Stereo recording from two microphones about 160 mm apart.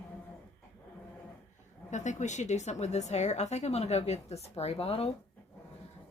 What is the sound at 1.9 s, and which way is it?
A woman's voice, 50° left (ahead or behind).